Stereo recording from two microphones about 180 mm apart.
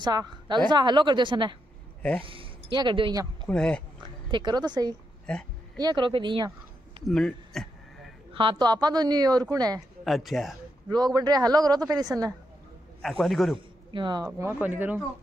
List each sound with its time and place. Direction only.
0.0 s speech: 25° right (ahead or behind)
3.4 s a man's voice: 5° left (ahead or behind)
4.0 s speech: 25° right (ahead or behind)
5.3 s a man's voice: 5° left (ahead or behind)
5.8 s speech: 25° right (ahead or behind)
7.1 s a man's voice: centre (ahead or behind)
8.3 s speech: 30° right (ahead or behind)
10.0 s a man's voice: centre (ahead or behind)
11.1 s speech: 20° right (ahead or behind)
13.0 s a man's voice: centre (ahead or behind)
13.9 s speech: 25° right (ahead or behind)